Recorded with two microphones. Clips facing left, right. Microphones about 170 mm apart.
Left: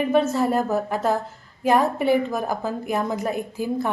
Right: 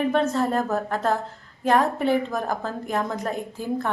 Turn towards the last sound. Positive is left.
turn(degrees=10)  # may be behind; listen again after turning